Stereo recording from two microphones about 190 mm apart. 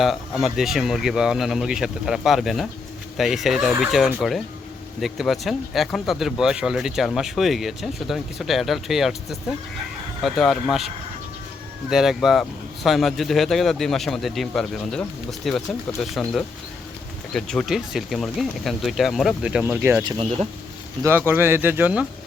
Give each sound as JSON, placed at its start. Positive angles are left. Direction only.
{"t": 0.0, "sound": "speech", "side_deg": 0}
{"t": 20.1, "sound": "speech", "side_deg": -30}
{"t": 21.0, "sound": "speech", "side_deg": -10}